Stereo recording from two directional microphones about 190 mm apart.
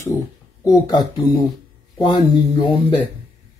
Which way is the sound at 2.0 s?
25° left (ahead or behind).